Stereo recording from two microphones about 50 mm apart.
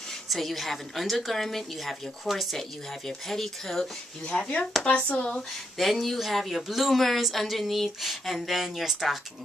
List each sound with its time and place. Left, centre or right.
0.3 s a woman's voice: centre
4.3 s speech: centre
4.8 s speech: left
5.8 s a woman's voice: centre